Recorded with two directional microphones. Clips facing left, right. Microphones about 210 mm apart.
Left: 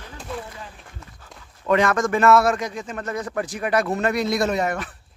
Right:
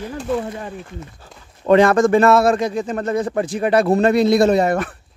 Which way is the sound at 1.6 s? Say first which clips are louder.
Right 7 dB; 30° right (ahead or behind).